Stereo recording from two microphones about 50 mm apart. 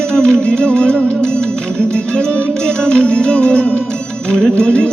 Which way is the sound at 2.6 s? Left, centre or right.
Centre.